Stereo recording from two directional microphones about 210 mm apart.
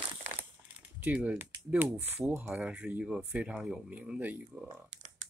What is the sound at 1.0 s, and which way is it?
Speech, 5° right (ahead or behind).